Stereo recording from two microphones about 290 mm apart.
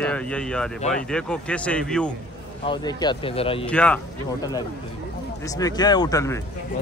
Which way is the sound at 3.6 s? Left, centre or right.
Centre.